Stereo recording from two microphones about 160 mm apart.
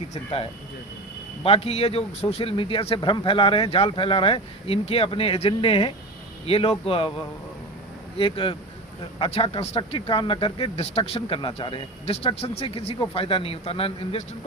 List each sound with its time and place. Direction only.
0.1 s speech: 40° left (ahead or behind)
1.5 s speech: 40° left (ahead or behind)
8.2 s speech: 35° left (ahead or behind)